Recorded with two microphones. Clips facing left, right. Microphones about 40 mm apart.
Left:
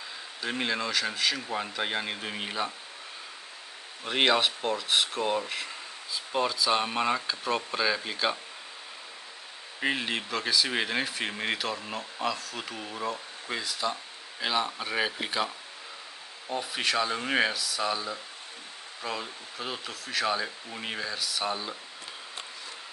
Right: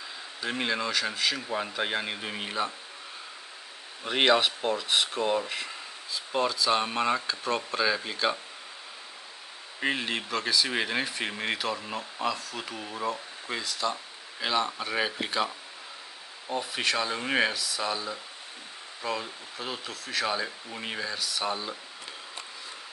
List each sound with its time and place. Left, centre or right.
0.4 s speech: centre
4.0 s speech: centre
9.8 s speech: centre